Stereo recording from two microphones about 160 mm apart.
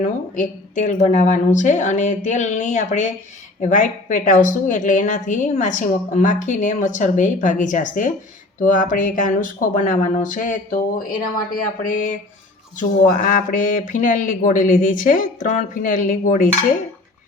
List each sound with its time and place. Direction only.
0.0 s a woman's voice: 50° left (ahead or behind)